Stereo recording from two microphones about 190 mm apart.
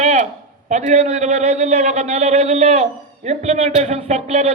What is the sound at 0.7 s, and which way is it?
Speech, 40° right (ahead or behind).